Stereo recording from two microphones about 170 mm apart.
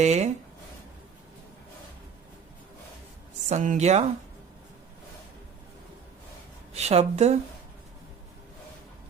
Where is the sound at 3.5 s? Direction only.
45° right (ahead or behind).